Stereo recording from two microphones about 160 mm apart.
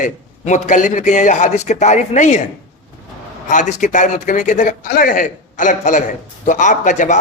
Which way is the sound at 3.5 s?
50° left (ahead or behind).